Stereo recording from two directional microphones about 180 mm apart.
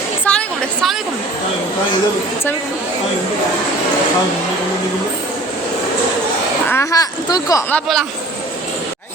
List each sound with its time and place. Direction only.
0.3 s a sound: 5° left (ahead or behind)
6.7 s speech: 15° left (ahead or behind)
7.7 s speech: centre (ahead or behind)